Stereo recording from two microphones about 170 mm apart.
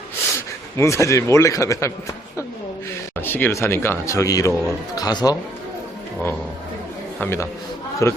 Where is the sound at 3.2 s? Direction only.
10° left (ahead or behind).